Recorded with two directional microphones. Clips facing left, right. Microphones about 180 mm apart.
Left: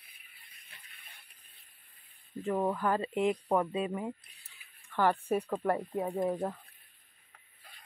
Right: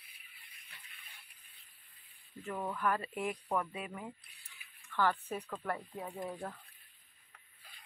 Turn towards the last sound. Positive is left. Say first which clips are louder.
# left 10 dB
turn(degrees=40)  # may be behind; listen again after turning